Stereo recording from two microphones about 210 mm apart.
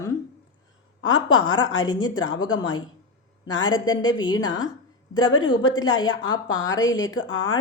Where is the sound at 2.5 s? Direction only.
75° left (ahead or behind).